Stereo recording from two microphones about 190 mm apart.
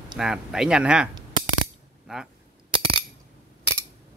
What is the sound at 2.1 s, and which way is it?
Speech, 5° right (ahead or behind).